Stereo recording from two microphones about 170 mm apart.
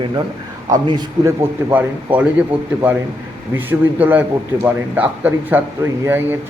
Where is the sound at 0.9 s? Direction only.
25° right (ahead or behind).